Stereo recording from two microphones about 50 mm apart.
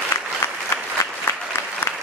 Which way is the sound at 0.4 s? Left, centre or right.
Left.